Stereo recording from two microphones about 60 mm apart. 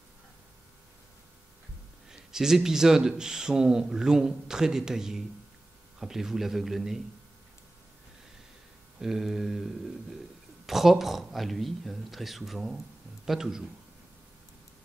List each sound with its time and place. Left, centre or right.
2.0 s speech: centre
9.0 s speech: centre